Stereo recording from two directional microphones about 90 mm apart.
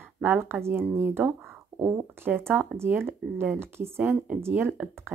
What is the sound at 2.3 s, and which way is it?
Speech, 25° right (ahead or behind).